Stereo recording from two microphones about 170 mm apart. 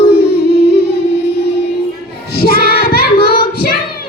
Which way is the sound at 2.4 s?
65° left (ahead or behind).